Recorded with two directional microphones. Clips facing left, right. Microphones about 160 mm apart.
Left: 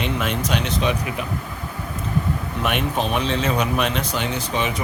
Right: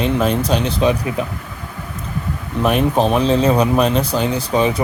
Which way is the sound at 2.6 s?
35° right (ahead or behind).